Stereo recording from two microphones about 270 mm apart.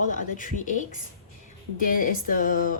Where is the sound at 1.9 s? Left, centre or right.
Left.